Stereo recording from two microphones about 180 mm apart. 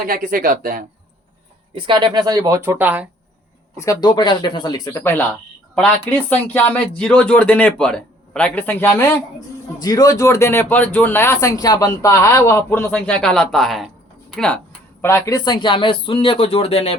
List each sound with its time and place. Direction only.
0.1 s speech: 50° right (ahead or behind)
1.7 s speech: 25° right (ahead or behind); by 3.1 s 10° right (ahead or behind)
3.8 s speech: 20° left (ahead or behind)